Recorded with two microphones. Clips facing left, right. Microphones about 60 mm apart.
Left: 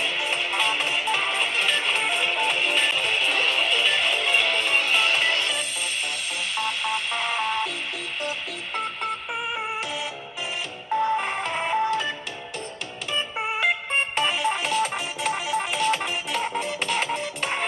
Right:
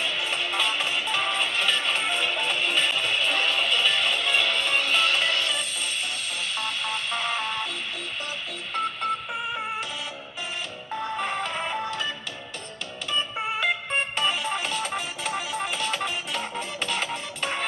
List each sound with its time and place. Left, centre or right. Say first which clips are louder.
0.0 s music: left 2 dB; centre
8.7 s music: right 2 dB; centre
11.0 s music: left 4 dB; centre
13.4 s music: left 4 dB; centre